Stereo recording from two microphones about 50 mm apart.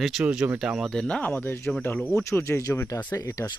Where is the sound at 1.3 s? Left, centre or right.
Left.